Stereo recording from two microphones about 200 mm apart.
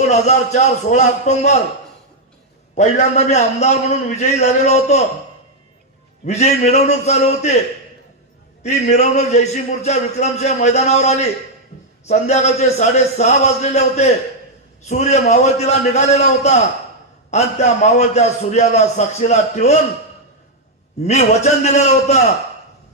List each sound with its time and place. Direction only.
0.1 s speech: 35° left (ahead or behind)
2.7 s speech: 35° left (ahead or behind)
6.2 s speech: 35° left (ahead or behind)
8.6 s speech: 35° left (ahead or behind)
21.0 s speech: 35° left (ahead or behind)